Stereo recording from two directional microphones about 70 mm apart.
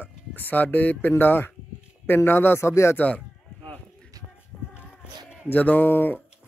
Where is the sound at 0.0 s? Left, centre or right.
Left.